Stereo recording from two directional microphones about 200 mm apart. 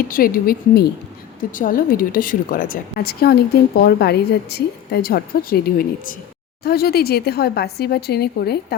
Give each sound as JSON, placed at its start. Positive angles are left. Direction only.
{"t": 0.1, "sound": "a woman's voice", "side_deg": 45}